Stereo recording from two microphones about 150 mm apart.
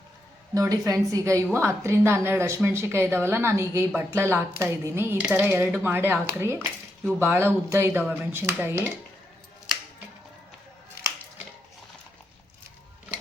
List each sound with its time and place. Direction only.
0.5 s a woman's voice: 20° right (ahead or behind)